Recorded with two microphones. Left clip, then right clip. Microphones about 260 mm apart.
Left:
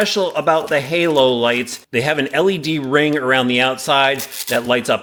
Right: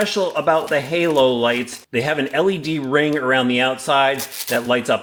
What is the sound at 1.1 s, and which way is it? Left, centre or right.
Speech, left.